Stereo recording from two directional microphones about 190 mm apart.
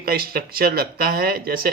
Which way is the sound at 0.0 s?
50° right (ahead or behind).